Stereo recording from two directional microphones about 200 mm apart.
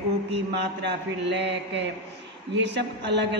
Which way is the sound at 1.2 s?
60° right (ahead or behind).